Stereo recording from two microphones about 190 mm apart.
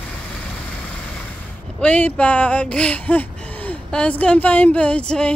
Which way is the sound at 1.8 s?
5° left (ahead or behind).